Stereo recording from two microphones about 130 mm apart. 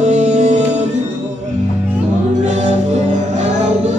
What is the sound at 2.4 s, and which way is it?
Music, 65° right (ahead or behind).